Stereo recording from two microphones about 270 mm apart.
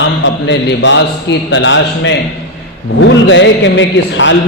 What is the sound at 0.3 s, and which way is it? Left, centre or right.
A man's voice, left.